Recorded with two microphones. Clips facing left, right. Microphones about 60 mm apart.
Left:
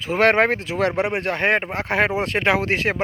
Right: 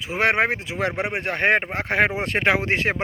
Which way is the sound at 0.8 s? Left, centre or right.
Right.